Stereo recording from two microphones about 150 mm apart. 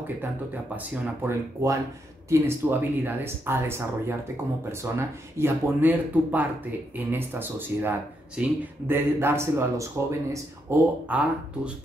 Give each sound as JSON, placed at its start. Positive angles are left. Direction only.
{"t": 1.2, "sound": "speech", "side_deg": -20}